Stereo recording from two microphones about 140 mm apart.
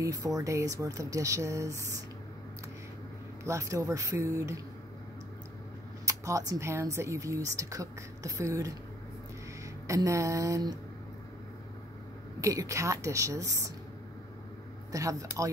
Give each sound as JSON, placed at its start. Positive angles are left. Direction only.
{"t": 0.0, "sound": "speech", "side_deg": -25}
{"t": 3.4, "sound": "speech", "side_deg": -20}
{"t": 6.0, "sound": "speech", "side_deg": -20}
{"t": 9.8, "sound": "speech", "side_deg": -20}
{"t": 12.4, "sound": "speech", "side_deg": -25}
{"t": 14.9, "sound": "speech", "side_deg": -25}